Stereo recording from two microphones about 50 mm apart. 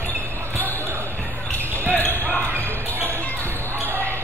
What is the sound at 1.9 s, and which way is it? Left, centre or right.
Basketball bounce, left.